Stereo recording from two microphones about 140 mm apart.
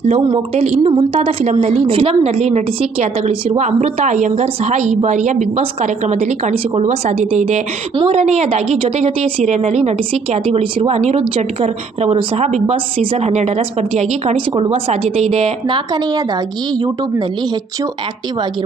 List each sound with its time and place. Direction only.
0.3 s a woman's voice: 40° right (ahead or behind)